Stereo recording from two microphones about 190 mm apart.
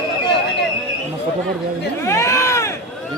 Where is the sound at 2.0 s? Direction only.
15° left (ahead or behind).